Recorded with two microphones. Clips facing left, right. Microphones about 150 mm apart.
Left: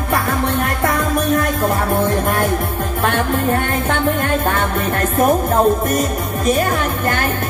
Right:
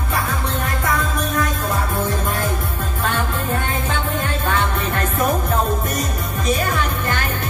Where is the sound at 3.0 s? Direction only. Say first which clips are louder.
Left 6 dB; 55° left (ahead or behind).